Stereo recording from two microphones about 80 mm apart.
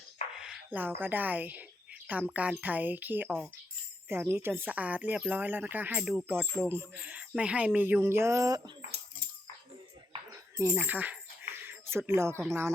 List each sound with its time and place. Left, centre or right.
0.3 s a sound: centre
0.7 s a woman's voice: right
6.0 s speech: centre
6.2 s speech: centre
7.0 s speech: centre; by 8.5 s right
10.8 s a sound: right